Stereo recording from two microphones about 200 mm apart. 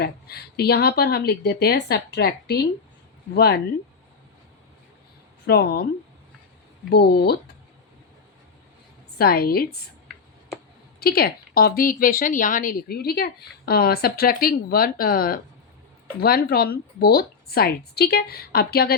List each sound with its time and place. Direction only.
0.0 s a woman's voice: 55° left (ahead or behind)
5.5 s a woman's voice: 55° left (ahead or behind)
6.9 s a woman's voice: 55° left (ahead or behind)
9.1 s a woman's voice: 50° left (ahead or behind)
11.0 s a woman's voice: 50° left (ahead or behind)